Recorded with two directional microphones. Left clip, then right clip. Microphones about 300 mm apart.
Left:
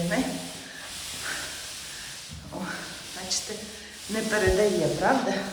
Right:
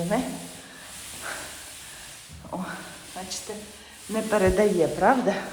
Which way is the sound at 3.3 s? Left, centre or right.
Centre.